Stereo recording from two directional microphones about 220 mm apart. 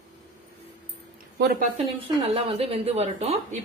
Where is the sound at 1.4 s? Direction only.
40° right (ahead or behind).